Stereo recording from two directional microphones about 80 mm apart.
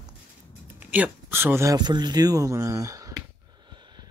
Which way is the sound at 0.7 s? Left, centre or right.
Centre.